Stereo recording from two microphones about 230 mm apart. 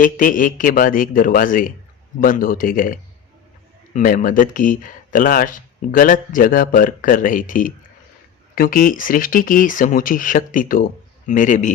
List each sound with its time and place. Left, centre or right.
0.0 s speech: left